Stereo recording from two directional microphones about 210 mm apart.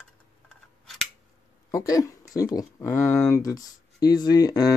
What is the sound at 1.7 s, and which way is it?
Speech, 15° left (ahead or behind).